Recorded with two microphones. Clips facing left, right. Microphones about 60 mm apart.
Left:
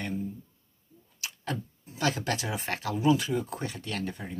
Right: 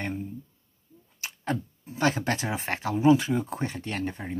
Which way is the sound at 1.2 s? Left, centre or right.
Right.